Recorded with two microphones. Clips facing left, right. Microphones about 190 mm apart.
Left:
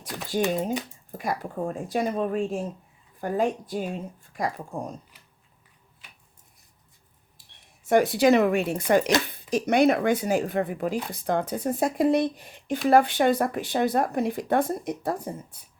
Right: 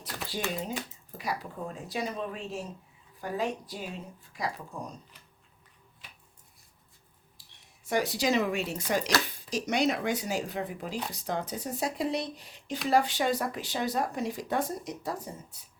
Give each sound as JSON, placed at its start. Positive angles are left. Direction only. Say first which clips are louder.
{"t": 0.0, "sound": "a sound", "louder": "left 9 dB", "side_deg": 50}
{"t": 1.1, "sound": "speech", "louder": "left 6 dB", "side_deg": 50}
{"t": 7.9, "sound": "speech", "louder": "left 9 dB", "side_deg": 55}